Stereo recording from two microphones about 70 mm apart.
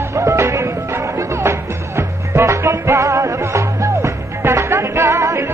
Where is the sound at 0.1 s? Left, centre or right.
Right.